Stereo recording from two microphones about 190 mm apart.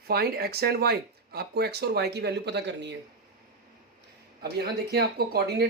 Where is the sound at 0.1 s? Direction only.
55° right (ahead or behind).